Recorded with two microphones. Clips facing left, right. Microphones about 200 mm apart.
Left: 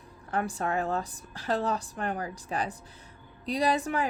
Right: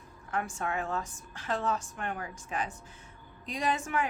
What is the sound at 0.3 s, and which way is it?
A woman's voice, 35° left (ahead or behind).